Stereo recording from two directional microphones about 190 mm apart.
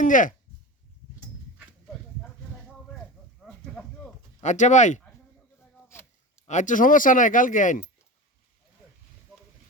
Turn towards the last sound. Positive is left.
turn(degrees=45)  # may be behind; listen again after turning